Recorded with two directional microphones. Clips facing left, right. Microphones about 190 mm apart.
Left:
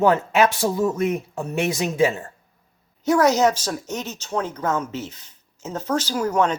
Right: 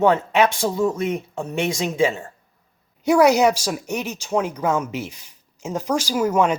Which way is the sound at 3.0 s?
10° right (ahead or behind).